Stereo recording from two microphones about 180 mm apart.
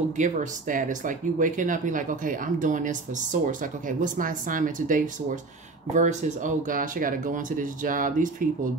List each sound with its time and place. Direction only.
0.2 s speech: 45° right (ahead or behind)